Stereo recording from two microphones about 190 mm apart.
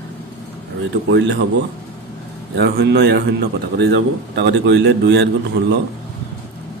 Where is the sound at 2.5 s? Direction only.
60° right (ahead or behind).